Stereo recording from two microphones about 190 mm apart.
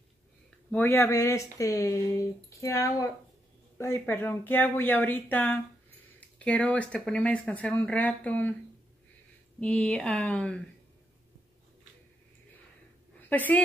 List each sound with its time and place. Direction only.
0.7 s speech: 10° left (ahead or behind)
9.6 s speech: 5° left (ahead or behind)
13.3 s speech: 10° left (ahead or behind)